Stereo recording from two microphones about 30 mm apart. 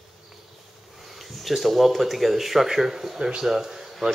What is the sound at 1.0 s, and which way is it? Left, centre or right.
Speech, centre.